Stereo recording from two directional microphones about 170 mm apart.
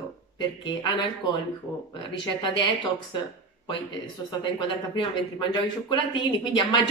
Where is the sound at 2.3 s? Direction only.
30° left (ahead or behind).